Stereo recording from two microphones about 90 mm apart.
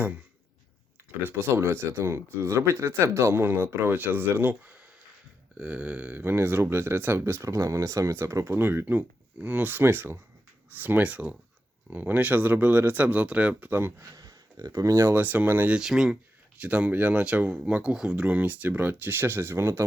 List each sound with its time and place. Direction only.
1.2 s speech: 25° right (ahead or behind)
14.0 s speech: 40° right (ahead or behind)
15.2 s speech: 20° right (ahead or behind)
15.7 s speech: 5° right (ahead or behind); by 19.8 s 30° right (ahead or behind)